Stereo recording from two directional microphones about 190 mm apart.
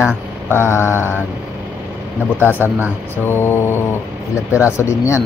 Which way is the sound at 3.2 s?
10° left (ahead or behind).